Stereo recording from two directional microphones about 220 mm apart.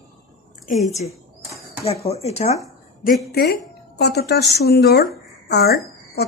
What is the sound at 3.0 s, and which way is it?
A woman's voice, 40° left (ahead or behind).